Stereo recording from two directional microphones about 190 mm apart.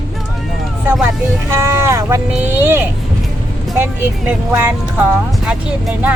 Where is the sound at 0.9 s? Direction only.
10° right (ahead or behind).